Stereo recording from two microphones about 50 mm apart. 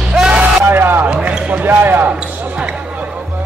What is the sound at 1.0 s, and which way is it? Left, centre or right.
Basketball bounce, centre.